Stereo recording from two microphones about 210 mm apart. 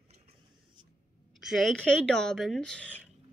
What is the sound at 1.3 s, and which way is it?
A woman's voice, centre (ahead or behind).